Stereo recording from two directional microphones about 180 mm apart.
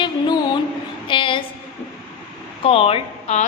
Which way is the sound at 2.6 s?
30° left (ahead or behind).